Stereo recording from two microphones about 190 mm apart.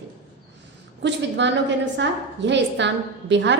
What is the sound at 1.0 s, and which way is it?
A woman's voice, 65° right (ahead or behind).